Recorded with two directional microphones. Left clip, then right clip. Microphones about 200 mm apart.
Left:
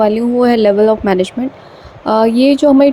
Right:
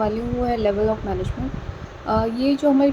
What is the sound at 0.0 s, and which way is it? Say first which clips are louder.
A woman's voice: left 12 dB; 45° left (ahead or behind).